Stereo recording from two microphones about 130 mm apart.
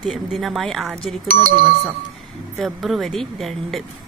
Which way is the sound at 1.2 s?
90° right.